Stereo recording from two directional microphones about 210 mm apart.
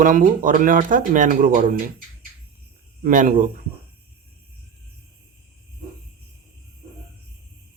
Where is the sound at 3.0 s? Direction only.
40° right (ahead or behind).